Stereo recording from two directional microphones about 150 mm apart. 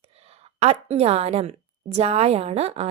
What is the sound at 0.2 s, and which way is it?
A woman's voice, 45° right (ahead or behind).